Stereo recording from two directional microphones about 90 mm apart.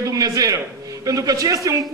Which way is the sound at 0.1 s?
40° right (ahead or behind).